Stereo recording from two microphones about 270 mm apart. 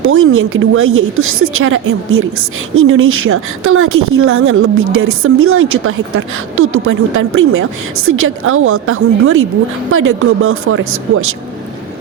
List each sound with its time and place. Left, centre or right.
0.0 s a woman's voice: right